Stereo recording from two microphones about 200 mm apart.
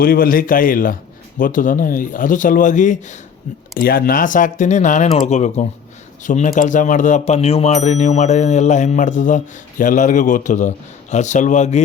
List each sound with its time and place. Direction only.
0.0 s a man's voice: 45° left (ahead or behind)